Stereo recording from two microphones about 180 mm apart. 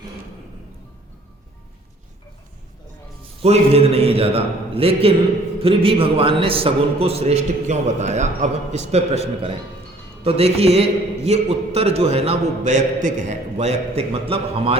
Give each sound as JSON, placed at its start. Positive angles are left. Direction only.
{"t": 3.4, "sound": "a man's voice", "side_deg": -35}